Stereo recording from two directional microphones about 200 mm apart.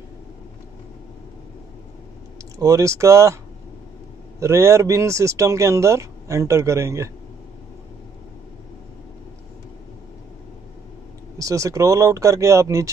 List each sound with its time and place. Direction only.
2.6 s speech: 15° right (ahead or behind)
4.4 s speech: 15° right (ahead or behind)
11.3 s speech: 15° right (ahead or behind)